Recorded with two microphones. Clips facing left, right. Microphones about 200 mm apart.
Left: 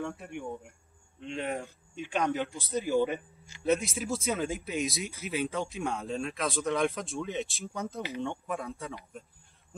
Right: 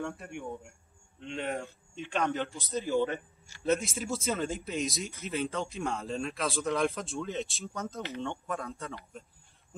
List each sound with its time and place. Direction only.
0.0 s speech: centre (ahead or behind)
2.7 s a man's voice: 15° left (ahead or behind)
3.6 s speech: centre (ahead or behind)
7.6 s speech: 15° left (ahead or behind)